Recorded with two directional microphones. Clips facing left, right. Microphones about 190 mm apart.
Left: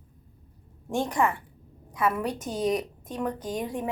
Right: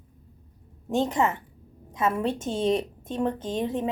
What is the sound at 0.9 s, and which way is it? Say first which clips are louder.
A woman's voice: right 2 dB; 20° right (ahead or behind).